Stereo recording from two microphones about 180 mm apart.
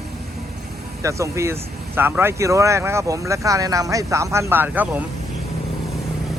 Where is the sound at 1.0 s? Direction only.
15° right (ahead or behind).